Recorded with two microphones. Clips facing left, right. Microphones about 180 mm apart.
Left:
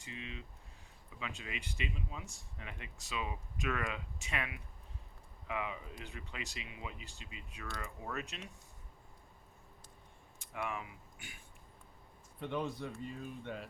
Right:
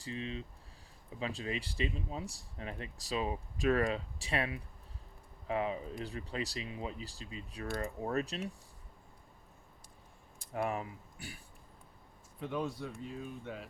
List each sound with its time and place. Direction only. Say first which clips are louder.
0.0 s speech: right 7 dB; 35° right (ahead or behind)
10.3 s speech: right 6 dB; 40° right (ahead or behind)
12.4 s speech: right 1 dB; 5° right (ahead or behind)